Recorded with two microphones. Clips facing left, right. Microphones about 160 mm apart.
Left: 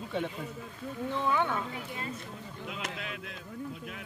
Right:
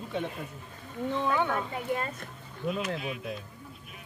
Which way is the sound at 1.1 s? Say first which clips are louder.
Right 2 dB; 15° right (ahead or behind).